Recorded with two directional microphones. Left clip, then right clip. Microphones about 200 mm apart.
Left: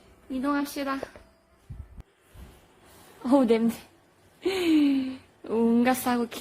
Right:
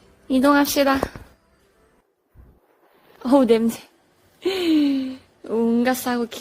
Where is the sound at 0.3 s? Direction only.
40° right (ahead or behind).